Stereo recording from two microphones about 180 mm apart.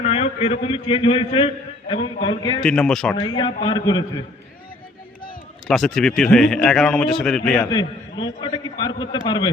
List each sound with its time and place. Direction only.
0.0 s a man's voice: 35° left (ahead or behind)
2.6 s speech: 5° left (ahead or behind)
3.2 s a man's voice: 25° left (ahead or behind)
5.6 s speech: centre (ahead or behind)
7.6 s a man's voice: 25° left (ahead or behind)